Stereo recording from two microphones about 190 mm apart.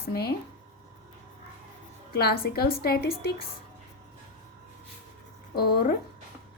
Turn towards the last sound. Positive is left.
turn(degrees=55)  # may be behind; listen again after turning